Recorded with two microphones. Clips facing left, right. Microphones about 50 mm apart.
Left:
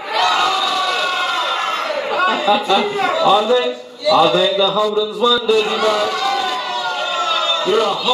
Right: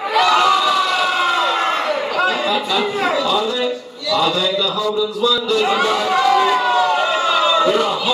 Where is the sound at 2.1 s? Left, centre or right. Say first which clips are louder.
Left 5 dB; centre.